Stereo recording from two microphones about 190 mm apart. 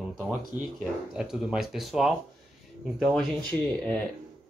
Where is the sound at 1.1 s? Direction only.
5° right (ahead or behind).